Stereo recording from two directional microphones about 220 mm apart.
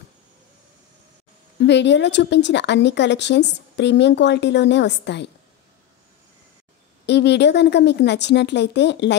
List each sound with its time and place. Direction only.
1.6 s speech: 50° left (ahead or behind)
7.1 s speech: 50° left (ahead or behind)